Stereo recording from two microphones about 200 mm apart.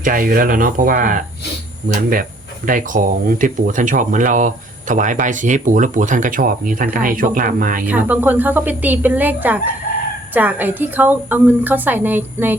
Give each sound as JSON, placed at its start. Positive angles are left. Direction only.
{"t": 0.0, "sound": "speech", "side_deg": -45}
{"t": 7.9, "sound": "a woman's voice", "side_deg": -10}